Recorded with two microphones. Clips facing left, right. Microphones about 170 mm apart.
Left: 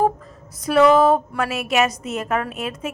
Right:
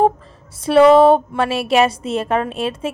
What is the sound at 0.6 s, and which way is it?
A woman's voice, 30° right (ahead or behind).